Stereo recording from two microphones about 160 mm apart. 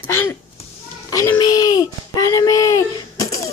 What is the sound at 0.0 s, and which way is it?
Speech, 15° left (ahead or behind).